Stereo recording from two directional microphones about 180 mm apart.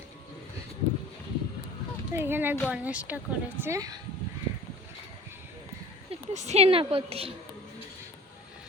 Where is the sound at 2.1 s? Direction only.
15° right (ahead or behind).